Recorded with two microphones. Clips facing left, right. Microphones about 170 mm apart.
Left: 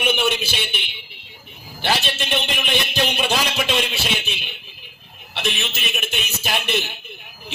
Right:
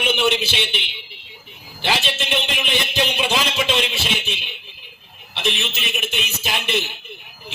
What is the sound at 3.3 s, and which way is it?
Speech, 55° left (ahead or behind).